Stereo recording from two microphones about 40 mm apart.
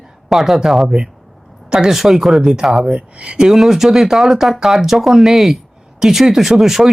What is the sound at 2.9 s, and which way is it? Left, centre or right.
Speech, right.